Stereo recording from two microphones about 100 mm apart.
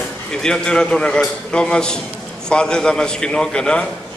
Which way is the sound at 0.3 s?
5° left (ahead or behind).